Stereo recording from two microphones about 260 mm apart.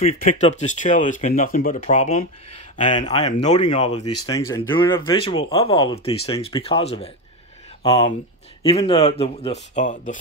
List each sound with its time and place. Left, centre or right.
0.4 s speech: left
4.0 s speech: left
4.3 s speech: centre; by 10.1 s left